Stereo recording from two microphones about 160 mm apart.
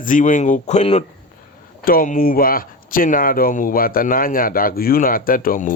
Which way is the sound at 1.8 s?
60° left (ahead or behind).